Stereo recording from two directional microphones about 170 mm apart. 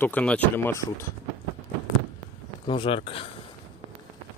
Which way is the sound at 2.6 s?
30° left (ahead or behind).